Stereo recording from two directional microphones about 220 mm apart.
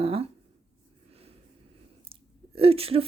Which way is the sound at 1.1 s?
25° right (ahead or behind).